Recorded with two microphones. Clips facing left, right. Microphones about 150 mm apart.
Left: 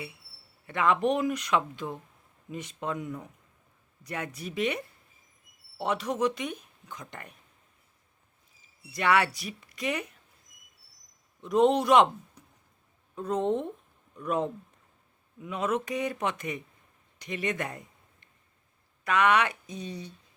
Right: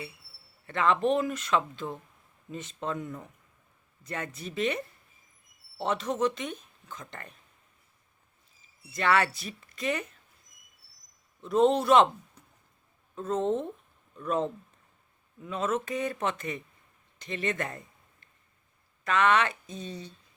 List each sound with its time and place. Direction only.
0.7 s speech: 15° left (ahead or behind)
8.9 s speech: 15° left (ahead or behind)
11.4 s speech: 15° left (ahead or behind)
17.2 s a sound: 15° left (ahead or behind)
19.0 s speech: 10° left (ahead or behind)